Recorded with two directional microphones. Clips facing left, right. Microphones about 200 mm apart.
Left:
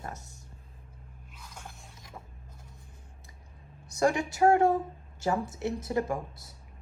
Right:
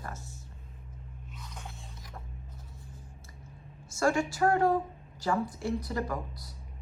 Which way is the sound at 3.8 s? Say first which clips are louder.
Left 1 dB; 20° left (ahead or behind).